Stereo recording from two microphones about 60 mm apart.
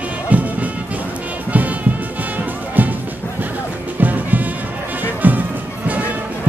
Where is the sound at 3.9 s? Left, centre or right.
Right.